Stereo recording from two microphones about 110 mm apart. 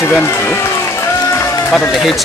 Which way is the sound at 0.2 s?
25° left (ahead or behind).